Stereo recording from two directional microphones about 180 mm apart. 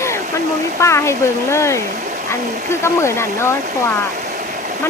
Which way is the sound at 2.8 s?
15° left (ahead or behind).